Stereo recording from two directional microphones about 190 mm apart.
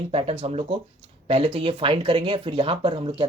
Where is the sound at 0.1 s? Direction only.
35° right (ahead or behind).